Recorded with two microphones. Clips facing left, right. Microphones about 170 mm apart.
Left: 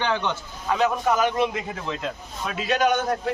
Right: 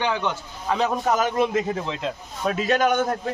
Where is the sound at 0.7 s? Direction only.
35° right (ahead or behind).